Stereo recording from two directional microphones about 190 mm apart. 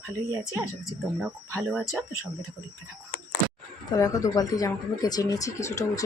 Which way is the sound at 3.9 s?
20° left (ahead or behind).